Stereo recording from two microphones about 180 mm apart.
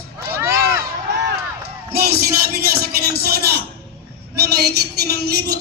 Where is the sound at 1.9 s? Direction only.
55° right (ahead or behind).